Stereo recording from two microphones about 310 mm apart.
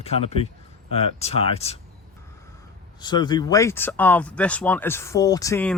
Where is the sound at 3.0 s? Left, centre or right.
Centre.